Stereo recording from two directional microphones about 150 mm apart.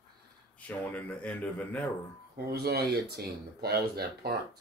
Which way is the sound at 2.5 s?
90° right.